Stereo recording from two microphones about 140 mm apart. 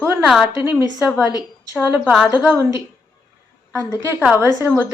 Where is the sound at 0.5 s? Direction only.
15° right (ahead or behind).